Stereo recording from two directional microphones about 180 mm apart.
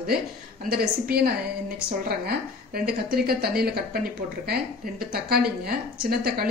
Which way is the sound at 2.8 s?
60° right (ahead or behind).